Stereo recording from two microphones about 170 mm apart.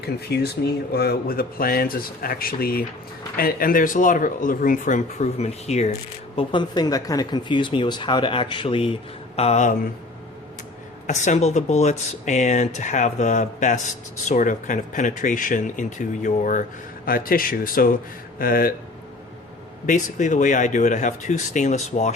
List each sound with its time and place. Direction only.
0.0 s speech: 75° left (ahead or behind); by 5.9 s 40° left (ahead or behind)
6.3 s speech: 25° left (ahead or behind); by 9.7 s 40° left (ahead or behind)
11.0 s speech: 45° left (ahead or behind); by 18.7 s 60° left (ahead or behind)
19.9 s speech: 50° left (ahead or behind)